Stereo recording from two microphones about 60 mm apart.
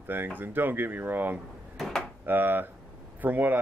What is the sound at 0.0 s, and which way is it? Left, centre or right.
Speech, right.